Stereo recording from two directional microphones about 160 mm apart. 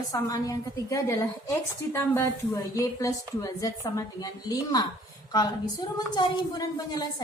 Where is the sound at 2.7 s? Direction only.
20° left (ahead or behind).